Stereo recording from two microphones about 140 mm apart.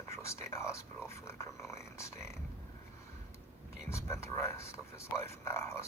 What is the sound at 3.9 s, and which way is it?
Speech, 20° left (ahead or behind).